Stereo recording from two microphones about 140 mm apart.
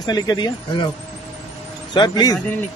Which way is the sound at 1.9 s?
30° left (ahead or behind).